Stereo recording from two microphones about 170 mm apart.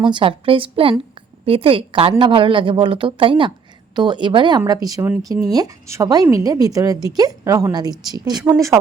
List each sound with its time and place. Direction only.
0.0 s a woman's voice: 30° right (ahead or behind)